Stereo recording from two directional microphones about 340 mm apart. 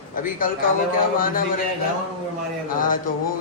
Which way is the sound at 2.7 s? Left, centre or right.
Left.